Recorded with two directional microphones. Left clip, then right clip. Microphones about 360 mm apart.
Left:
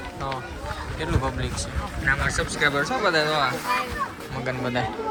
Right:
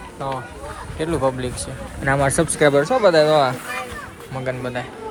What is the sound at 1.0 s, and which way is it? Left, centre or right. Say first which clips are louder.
Speech: right 8 dB; centre.